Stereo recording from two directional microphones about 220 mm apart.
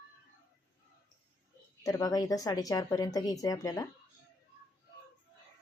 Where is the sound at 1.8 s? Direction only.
15° left (ahead or behind).